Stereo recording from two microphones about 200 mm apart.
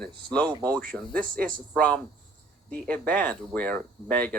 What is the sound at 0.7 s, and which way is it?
Speech, 5° left (ahead or behind).